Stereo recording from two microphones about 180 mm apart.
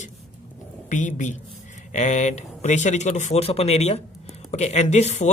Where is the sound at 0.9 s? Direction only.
45° left (ahead or behind).